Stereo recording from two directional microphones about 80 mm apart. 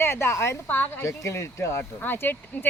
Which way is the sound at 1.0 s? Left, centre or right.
Left.